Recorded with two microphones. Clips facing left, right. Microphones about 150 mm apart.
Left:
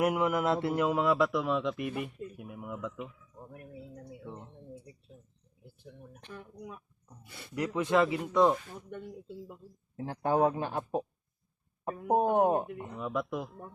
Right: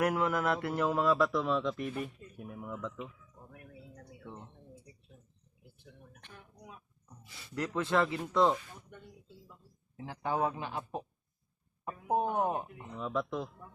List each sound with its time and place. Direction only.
0.0 s a man's voice: 20° left (ahead or behind)
3.4 s speech: 35° left (ahead or behind)
4.2 s a sound: 15° left (ahead or behind)
7.3 s speech: 55° left (ahead or behind)
7.5 s a man's voice: 15° left (ahead or behind)
8.9 s speech: 60° left (ahead or behind)
10.0 s speech: 45° left (ahead or behind)
13.0 s a man's voice: 10° left (ahead or behind)